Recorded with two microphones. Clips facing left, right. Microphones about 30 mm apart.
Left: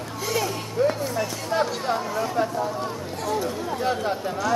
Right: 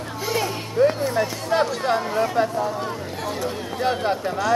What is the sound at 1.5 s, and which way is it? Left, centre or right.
Speech, right.